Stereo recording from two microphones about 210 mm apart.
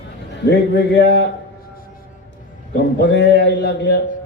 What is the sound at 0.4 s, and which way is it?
Speech, 55° left (ahead or behind).